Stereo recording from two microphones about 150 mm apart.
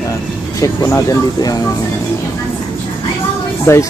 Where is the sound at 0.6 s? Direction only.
20° left (ahead or behind).